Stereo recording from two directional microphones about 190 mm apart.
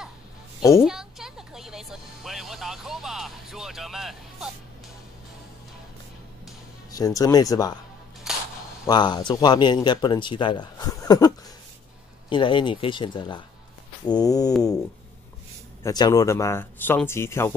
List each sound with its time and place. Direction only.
0.6 s a woman's voice: 15° left (ahead or behind)
0.8 s music: centre (ahead or behind)
6.9 s speech: 20° left (ahead or behind)
8.3 s cap gun: centre (ahead or behind)
8.8 s speech: 20° left (ahead or behind)
15.8 s speech: 20° left (ahead or behind)